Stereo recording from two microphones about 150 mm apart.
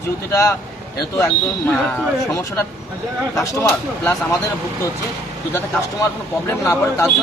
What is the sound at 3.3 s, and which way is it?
Speech, 20° left (ahead or behind).